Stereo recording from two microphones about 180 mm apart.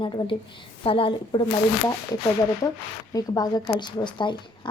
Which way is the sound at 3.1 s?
20° left (ahead or behind).